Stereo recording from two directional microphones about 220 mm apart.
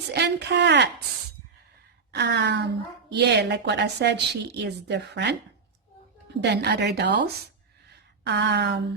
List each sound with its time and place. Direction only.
0.1 s a woman's voice: 50° right (ahead or behind)
2.1 s a woman's voice: 50° right (ahead or behind)
6.4 s a woman's voice: 50° right (ahead or behind)